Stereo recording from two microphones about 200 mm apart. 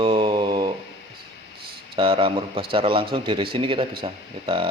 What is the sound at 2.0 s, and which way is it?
Speech, 25° right (ahead or behind).